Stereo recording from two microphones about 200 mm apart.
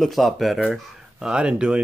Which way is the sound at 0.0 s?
Centre (ahead or behind).